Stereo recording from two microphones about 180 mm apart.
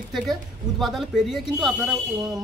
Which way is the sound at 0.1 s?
Centre (ahead or behind).